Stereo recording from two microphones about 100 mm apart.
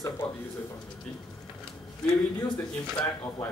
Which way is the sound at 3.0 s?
55° left (ahead or behind).